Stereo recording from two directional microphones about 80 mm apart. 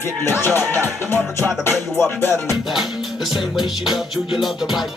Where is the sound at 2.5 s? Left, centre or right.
Centre.